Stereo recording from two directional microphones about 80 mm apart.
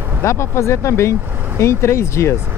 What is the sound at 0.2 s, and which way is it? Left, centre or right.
Speech, left.